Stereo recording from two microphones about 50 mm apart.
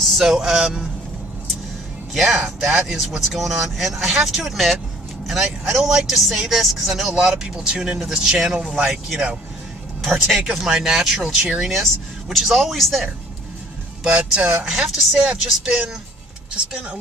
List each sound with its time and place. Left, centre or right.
0.2 s speech: centre
2.1 s speech: centre
10.0 s speech: centre
14.0 s speech: centre